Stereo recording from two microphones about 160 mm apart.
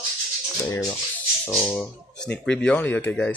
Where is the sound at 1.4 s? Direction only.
10° left (ahead or behind).